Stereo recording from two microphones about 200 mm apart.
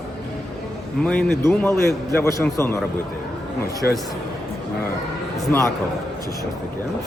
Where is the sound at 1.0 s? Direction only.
5° left (ahead or behind).